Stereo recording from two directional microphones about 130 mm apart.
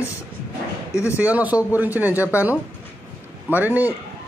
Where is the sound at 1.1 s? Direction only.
10° right (ahead or behind).